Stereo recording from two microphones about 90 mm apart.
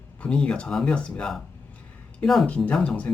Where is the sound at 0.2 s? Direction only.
10° left (ahead or behind).